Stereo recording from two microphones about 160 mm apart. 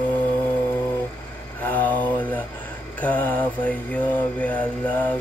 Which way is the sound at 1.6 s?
10° left (ahead or behind).